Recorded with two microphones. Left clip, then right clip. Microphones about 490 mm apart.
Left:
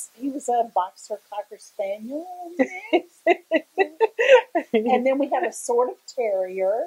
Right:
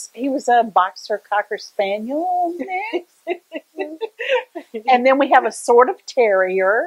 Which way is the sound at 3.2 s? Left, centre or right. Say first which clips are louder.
Left 7 dB; left.